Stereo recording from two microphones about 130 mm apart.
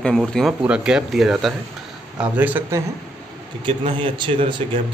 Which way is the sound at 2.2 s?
15° right (ahead or behind).